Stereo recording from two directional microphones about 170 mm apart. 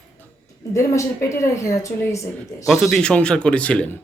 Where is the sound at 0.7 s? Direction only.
15° left (ahead or behind).